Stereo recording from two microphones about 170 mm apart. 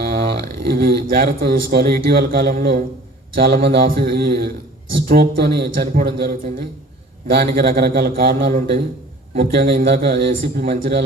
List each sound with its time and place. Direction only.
0.0 s a man's voice: 60° right (ahead or behind)